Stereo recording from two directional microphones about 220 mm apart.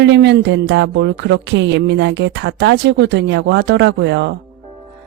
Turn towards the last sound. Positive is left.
turn(degrees=-55)  # may be behind; listen again after turning